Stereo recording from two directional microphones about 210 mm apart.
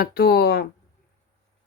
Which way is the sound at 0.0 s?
50° left (ahead or behind).